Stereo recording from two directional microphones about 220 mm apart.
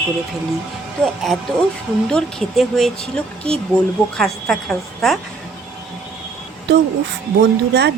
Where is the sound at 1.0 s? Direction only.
5° left (ahead or behind).